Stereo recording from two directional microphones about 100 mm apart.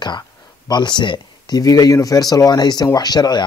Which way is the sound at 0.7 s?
45° left (ahead or behind).